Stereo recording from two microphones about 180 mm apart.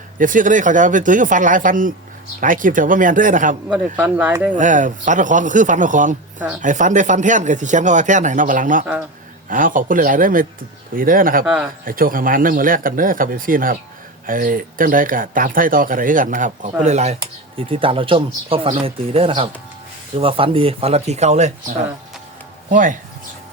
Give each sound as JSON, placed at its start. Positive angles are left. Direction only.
{"t": 0.2, "sound": "speech", "side_deg": -45}
{"t": 3.9, "sound": "speech", "side_deg": -10}
{"t": 4.5, "sound": "speech", "side_deg": -45}
{"t": 11.4, "sound": "speech", "side_deg": -5}
{"t": 11.9, "sound": "speech", "side_deg": -50}
{"t": 22.7, "sound": "speech", "side_deg": -45}